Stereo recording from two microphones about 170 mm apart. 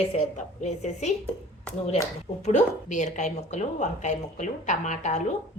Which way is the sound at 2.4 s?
45° left (ahead or behind).